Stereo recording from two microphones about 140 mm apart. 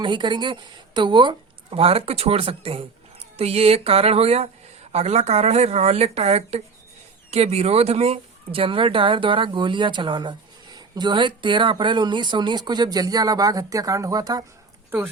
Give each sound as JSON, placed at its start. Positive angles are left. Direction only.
{"t": 0.0, "sound": "speech", "side_deg": -35}
{"t": 14.8, "sound": "speech", "side_deg": -15}